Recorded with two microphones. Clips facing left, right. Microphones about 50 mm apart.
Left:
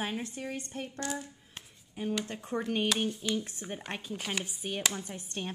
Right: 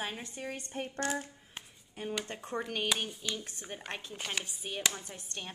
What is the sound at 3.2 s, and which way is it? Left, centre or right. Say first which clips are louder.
Speech: left 6 dB; centre.